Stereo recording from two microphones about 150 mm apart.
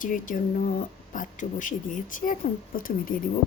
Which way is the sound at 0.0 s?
60° left (ahead or behind).